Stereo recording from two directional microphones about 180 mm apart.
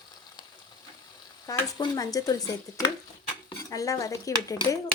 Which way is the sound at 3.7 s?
20° left (ahead or behind).